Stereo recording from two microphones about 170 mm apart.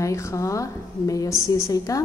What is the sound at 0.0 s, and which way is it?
A woman's voice, 15° left (ahead or behind).